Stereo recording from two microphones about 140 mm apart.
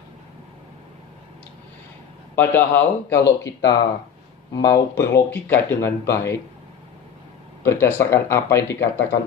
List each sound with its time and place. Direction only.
2.3 s speech: 15° left (ahead or behind)
7.6 s speech: 15° left (ahead or behind)